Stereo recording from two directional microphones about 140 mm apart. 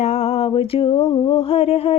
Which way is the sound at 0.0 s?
50° left (ahead or behind).